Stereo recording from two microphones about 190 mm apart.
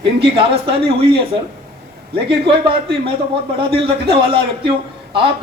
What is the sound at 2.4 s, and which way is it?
A man's voice, 25° right (ahead or behind).